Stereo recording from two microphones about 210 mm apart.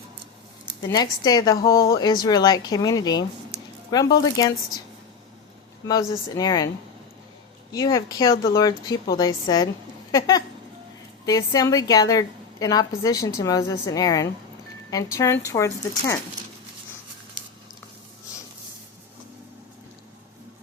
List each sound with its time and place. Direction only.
0.8 s a woman's voice: 20° left (ahead or behind)
1.7 s speech: 45° left (ahead or behind)
2.0 s a woman's voice: 20° left (ahead or behind)
5.9 s a woman's voice: 15° left (ahead or behind)
7.7 s a woman's voice: 15° left (ahead or behind)
10.1 s a sound: 15° left (ahead or behind)
11.3 s a woman's voice: 15° left (ahead or behind)